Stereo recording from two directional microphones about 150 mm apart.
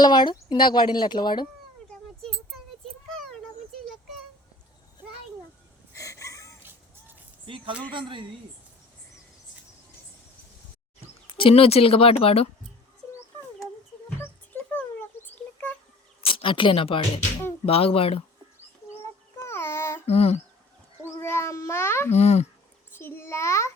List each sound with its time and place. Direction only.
0.0 s speech: 30° left (ahead or behind)
5.9 s a sound: 20° left (ahead or behind)
6.6 s music: 15° right (ahead or behind)
7.4 s a woman's voice: 35° right (ahead or behind)
11.3 s speech: 40° left (ahead or behind)
14.2 s a sound: 10° left (ahead or behind)
16.2 s speech: 35° left (ahead or behind)
19.4 s a sound: 15° left (ahead or behind)
20.1 s speech: 45° left (ahead or behind)
21.0 s cat: 15° left (ahead or behind)
22.1 s speech: 45° left (ahead or behind)
23.0 s a child's voice: 15° left (ahead or behind)